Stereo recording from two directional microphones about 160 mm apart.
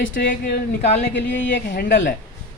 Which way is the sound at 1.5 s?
80° left.